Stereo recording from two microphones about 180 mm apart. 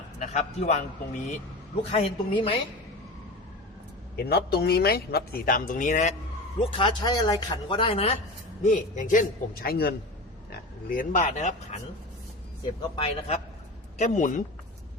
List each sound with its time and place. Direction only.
0.2 s a man's voice: 40° left (ahead or behind)
1.8 s a woman's voice: 30° left (ahead or behind)
4.2 s speech: 60° left (ahead or behind); by 6.1 s 40° left (ahead or behind)
6.6 s speech: 30° left (ahead or behind)
8.6 s a man's voice: 45° left (ahead or behind)
13.0 s a woman's voice: 35° left (ahead or behind)